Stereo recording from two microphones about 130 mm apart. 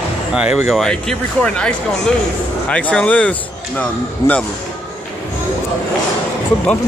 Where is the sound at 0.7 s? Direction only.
5° left (ahead or behind).